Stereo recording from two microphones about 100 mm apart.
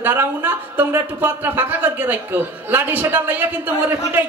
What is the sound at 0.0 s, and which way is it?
A man's voice, 20° right (ahead or behind).